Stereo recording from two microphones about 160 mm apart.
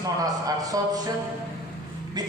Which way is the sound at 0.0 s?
20° right (ahead or behind).